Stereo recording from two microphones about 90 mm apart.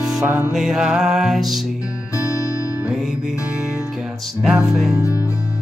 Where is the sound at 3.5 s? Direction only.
10° right (ahead or behind).